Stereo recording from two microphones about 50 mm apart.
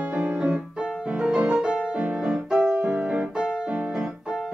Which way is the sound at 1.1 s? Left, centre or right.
Centre.